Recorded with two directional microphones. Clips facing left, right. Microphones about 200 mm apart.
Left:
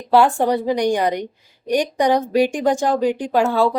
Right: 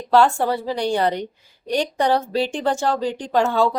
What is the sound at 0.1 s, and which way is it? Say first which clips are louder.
A woman's voice: left 2 dB; 15° left (ahead or behind).